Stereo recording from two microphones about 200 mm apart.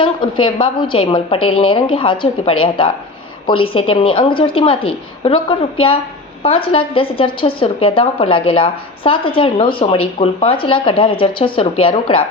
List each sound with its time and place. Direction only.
0.4 s a woman's voice: 25° left (ahead or behind)